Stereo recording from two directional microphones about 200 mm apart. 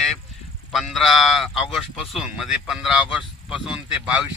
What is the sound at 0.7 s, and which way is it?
A man's voice, centre (ahead or behind).